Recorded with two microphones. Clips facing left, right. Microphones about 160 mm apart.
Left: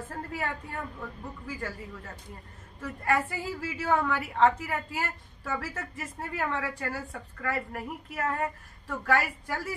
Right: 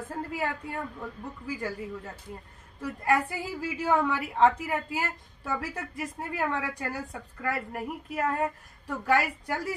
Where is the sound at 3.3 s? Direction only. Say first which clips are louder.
Right 1 dB; 15° right (ahead or behind).